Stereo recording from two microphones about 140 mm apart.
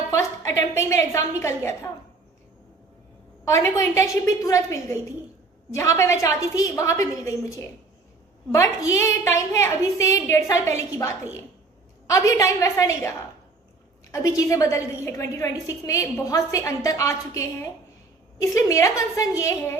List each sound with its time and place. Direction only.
0.1 s a woman's voice: 20° left (ahead or behind)
3.4 s a woman's voice: 25° left (ahead or behind)